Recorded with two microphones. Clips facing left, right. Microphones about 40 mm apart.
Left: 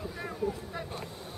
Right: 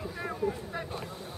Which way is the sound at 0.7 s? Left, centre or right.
Centre.